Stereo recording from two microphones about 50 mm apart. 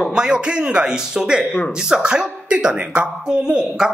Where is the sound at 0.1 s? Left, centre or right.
Centre.